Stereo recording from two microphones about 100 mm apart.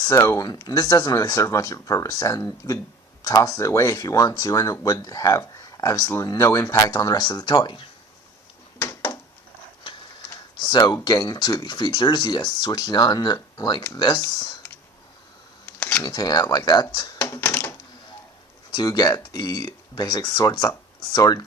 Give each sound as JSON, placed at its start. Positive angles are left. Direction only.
{"t": 0.0, "sound": "speech", "side_deg": 30}
{"t": 10.5, "sound": "a sound", "side_deg": 50}
{"t": 11.0, "sound": "speech", "side_deg": 45}
{"t": 16.0, "sound": "speech", "side_deg": 45}
{"t": 17.3, "sound": "typewriter", "side_deg": 15}
{"t": 18.7, "sound": "speech", "side_deg": 45}